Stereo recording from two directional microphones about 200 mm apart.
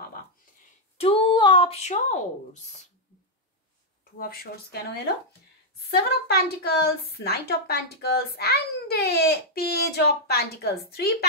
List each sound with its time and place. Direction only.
0.9 s speech: 30° left (ahead or behind)
4.2 s a woman's voice: 50° left (ahead or behind)